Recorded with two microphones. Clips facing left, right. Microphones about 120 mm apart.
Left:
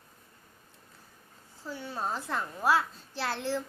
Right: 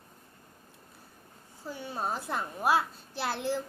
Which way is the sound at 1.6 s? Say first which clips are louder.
Even; 15° right (ahead or behind).